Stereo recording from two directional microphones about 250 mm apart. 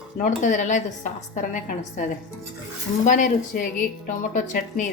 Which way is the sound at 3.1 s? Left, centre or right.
Left.